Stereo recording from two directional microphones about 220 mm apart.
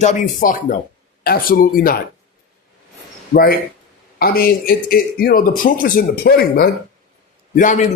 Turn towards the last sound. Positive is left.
turn(degrees=35)  # may be behind; listen again after turning